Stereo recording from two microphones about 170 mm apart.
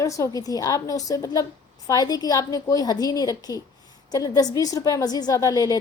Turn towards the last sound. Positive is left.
turn(degrees=20)  # may be behind; listen again after turning